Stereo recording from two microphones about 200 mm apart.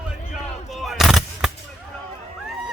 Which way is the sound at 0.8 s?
Centre (ahead or behind).